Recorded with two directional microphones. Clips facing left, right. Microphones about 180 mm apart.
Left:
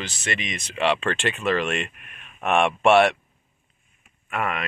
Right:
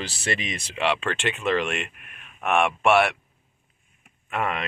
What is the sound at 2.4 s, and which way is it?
Speech, 25° left (ahead or behind).